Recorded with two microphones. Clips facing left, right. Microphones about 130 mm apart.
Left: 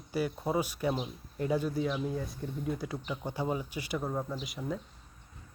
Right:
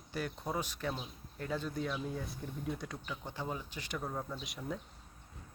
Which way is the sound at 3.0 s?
20° left (ahead or behind).